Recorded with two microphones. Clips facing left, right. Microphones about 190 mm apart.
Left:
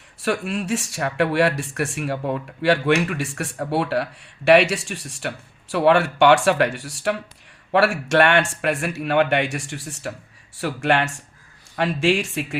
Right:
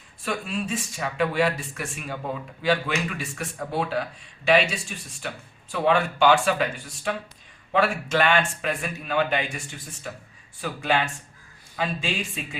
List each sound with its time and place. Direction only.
0.2 s speech: 75° left (ahead or behind)